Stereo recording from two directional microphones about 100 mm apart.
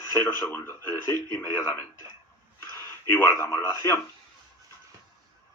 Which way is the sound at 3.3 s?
30° left (ahead or behind).